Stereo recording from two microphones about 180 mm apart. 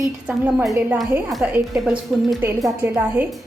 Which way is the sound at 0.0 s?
5° right (ahead or behind).